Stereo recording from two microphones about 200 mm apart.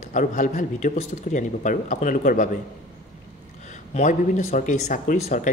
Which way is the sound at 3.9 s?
40° left (ahead or behind).